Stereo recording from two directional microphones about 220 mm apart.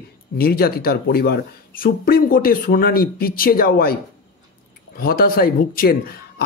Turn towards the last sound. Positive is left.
turn(degrees=45)  # may be behind; listen again after turning